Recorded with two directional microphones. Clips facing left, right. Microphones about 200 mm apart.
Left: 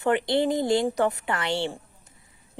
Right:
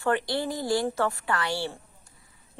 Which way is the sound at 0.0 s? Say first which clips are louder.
Left 4 dB; 20° left (ahead or behind).